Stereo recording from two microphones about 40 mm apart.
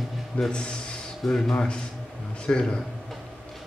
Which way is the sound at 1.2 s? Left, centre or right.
Centre.